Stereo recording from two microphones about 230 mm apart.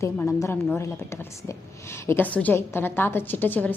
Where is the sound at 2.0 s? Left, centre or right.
Centre.